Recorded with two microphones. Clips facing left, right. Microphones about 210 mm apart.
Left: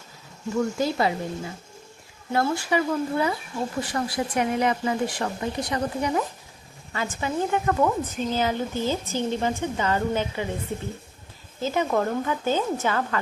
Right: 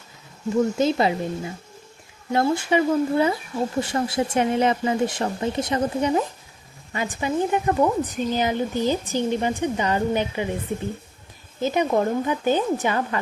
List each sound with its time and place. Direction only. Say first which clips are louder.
0.5 s speech: right 4 dB; 20° right (ahead or behind)
2.3 s a woman's voice: right 3 dB; 20° right (ahead or behind)
11.6 s a woman's voice: right 3 dB; 15° right (ahead or behind)